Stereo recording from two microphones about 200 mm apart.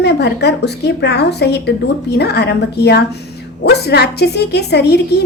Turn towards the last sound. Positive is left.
turn(degrees=55)  # may be behind; listen again after turning